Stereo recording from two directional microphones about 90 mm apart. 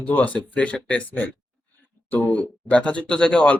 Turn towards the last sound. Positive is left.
turn(degrees=10)  # may be behind; listen again after turning